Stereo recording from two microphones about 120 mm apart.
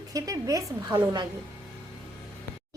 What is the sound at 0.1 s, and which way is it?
A woman's voice, 30° right (ahead or behind).